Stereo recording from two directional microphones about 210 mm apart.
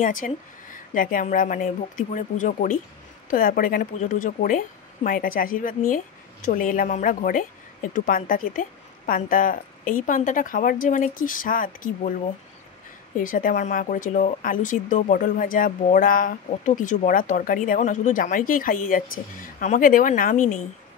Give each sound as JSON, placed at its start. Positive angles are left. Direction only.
{"t": 0.0, "sound": "speech", "side_deg": 40}
{"t": 13.2, "sound": "speech", "side_deg": 40}